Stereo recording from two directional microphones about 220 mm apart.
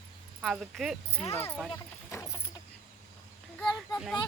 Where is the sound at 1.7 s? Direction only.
15° left (ahead or behind).